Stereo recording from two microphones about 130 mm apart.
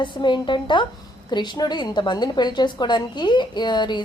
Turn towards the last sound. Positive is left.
turn(degrees=35)  # may be behind; listen again after turning